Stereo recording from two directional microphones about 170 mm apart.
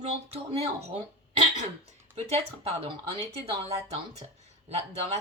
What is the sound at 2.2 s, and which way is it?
A woman's voice, 35° right (ahead or behind).